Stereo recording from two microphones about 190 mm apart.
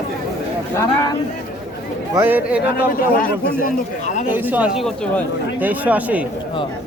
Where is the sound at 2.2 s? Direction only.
10° right (ahead or behind).